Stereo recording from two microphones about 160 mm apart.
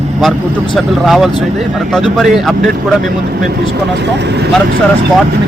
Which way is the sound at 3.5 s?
90° right.